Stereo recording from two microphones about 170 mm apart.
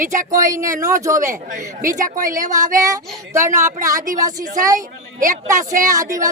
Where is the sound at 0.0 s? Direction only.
50° right (ahead or behind).